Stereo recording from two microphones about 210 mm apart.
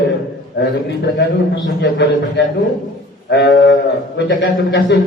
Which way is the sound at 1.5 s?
60° left (ahead or behind).